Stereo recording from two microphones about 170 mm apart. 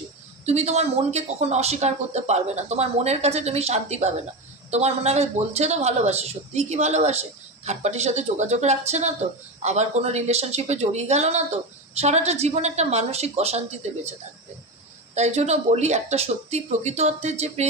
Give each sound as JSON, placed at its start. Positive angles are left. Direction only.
{"t": 0.4, "sound": "a woman's voice", "side_deg": -40}
{"t": 15.1, "sound": "a woman's voice", "side_deg": -40}